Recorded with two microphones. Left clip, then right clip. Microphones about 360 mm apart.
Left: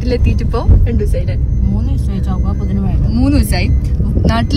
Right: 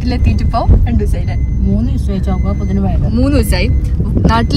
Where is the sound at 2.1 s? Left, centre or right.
Left.